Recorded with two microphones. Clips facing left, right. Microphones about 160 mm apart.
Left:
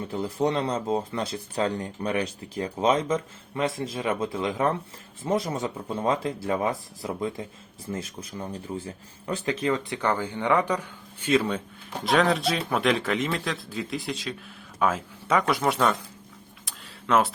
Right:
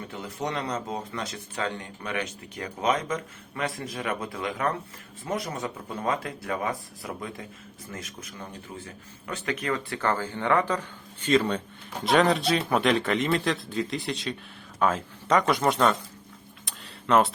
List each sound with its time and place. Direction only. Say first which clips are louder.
0.1 s speech: left 7 dB; 30° left (ahead or behind); by 16.0 s 5° left (ahead or behind)
16.6 s tick-tock: right 1 dB; centre (ahead or behind)